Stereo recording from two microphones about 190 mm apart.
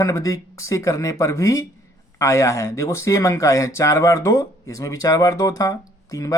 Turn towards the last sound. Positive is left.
turn(degrees=15)  # may be behind; listen again after turning